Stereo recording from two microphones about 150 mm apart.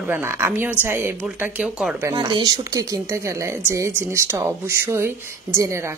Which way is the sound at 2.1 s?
30° right (ahead or behind).